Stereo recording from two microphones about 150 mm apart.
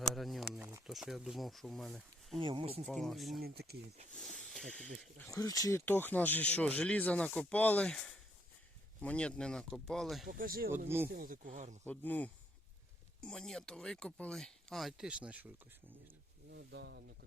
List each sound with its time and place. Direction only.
0.0 s a sound: centre (ahead or behind)
0.9 s speech: 5° right (ahead or behind)
2.4 s speech: 35° right (ahead or behind)
2.8 s speech: centre (ahead or behind)
4.4 s snake: 5° left (ahead or behind)
5.3 s speech: 25° left (ahead or behind); by 10.2 s centre (ahead or behind)
10.2 s speech: 70° right (ahead or behind)
10.8 s speech: 15° right (ahead or behind)
11.1 s speech: 70° right (ahead or behind)
11.9 s speech: 10° left (ahead or behind); by 15.4 s 5° right (ahead or behind)
16.7 s speech: 90° right